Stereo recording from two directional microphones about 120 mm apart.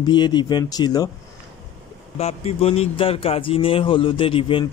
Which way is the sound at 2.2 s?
60° left (ahead or behind).